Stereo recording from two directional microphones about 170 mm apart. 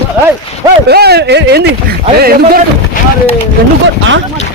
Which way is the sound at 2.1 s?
65° right (ahead or behind).